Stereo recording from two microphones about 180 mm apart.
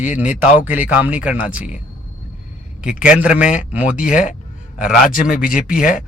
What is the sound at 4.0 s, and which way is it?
Speech, 45° left (ahead or behind).